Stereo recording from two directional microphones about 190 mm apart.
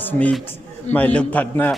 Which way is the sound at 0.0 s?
10° left (ahead or behind).